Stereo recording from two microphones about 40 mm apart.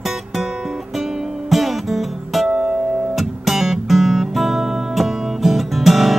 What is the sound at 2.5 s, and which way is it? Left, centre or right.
Music, centre.